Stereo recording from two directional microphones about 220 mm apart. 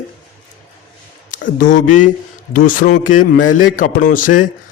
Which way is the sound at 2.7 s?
40° left (ahead or behind).